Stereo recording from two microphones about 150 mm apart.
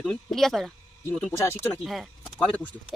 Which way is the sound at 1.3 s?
15° left (ahead or behind).